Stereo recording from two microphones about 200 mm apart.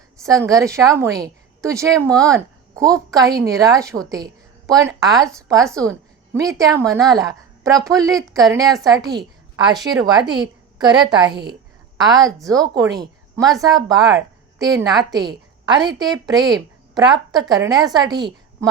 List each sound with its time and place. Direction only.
0.2 s a woman's voice: 15° right (ahead or behind)